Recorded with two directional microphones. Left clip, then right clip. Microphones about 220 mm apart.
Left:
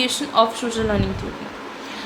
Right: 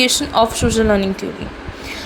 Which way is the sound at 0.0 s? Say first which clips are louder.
Right 4 dB; 25° right (ahead or behind).